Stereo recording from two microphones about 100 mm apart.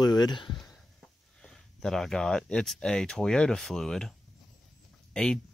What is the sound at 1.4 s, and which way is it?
Speech, 5° left (ahead or behind).